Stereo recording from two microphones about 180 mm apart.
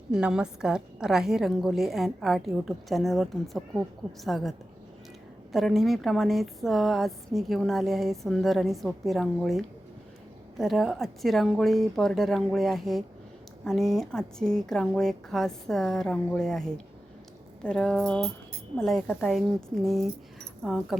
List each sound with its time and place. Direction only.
0.1 s a woman's voice: 5° right (ahead or behind)